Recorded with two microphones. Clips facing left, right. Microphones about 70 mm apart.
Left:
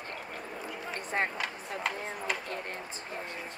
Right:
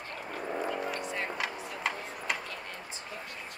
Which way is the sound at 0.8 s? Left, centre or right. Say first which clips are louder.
Left 2 dB; left.